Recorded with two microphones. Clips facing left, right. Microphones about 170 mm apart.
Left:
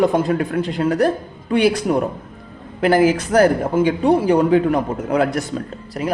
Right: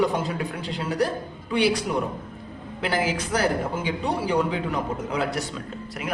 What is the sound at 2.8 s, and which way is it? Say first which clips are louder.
A man's voice: left 11 dB; 50° left (ahead or behind).